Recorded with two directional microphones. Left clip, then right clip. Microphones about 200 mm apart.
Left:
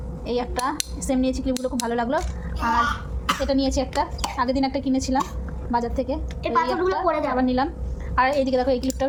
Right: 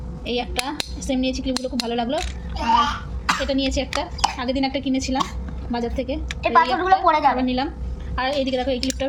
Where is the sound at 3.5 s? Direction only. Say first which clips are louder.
Even; centre (ahead or behind).